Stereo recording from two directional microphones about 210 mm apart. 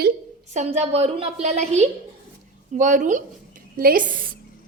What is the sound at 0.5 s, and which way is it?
A woman's voice, 30° right (ahead or behind).